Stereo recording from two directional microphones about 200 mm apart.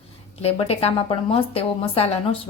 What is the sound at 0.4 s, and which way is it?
A woman's voice, 30° left (ahead or behind).